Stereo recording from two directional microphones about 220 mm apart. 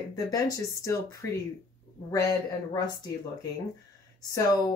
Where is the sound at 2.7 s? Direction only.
15° left (ahead or behind).